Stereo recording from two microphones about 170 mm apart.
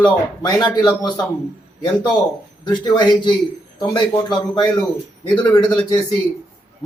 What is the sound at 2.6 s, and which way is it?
A man's voice, 25° left (ahead or behind).